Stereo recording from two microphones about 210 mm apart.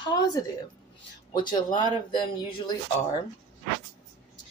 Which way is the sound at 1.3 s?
20° left (ahead or behind).